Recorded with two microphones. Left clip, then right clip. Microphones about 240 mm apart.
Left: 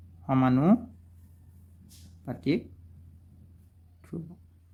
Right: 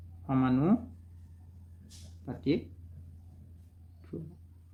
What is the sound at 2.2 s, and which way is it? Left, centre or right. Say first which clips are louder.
Speech: left 2 dB; left.